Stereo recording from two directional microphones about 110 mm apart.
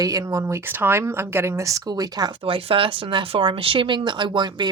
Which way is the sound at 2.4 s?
55° right (ahead or behind).